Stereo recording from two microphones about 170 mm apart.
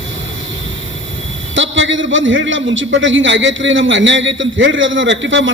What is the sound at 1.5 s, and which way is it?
A man's voice, 90° right.